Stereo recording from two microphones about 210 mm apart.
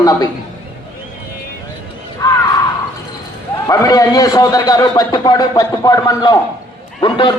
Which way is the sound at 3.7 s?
15° left (ahead or behind).